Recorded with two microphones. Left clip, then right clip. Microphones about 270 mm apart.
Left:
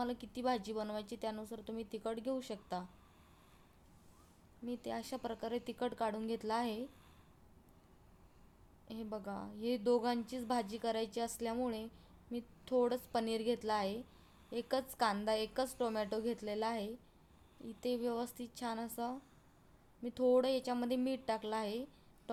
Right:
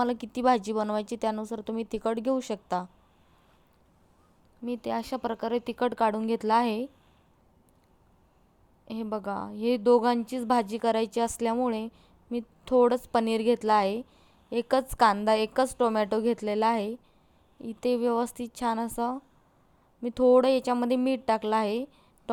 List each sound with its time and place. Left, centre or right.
0.0 s a woman's voice: right
4.6 s a woman's voice: right
8.9 s a woman's voice: right